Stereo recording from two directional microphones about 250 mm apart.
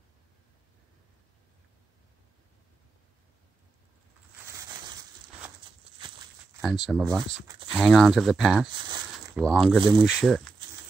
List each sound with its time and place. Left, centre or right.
4.5 s crushing: centre
6.6 s speech: centre
8.7 s a sound: centre
9.3 s speech: centre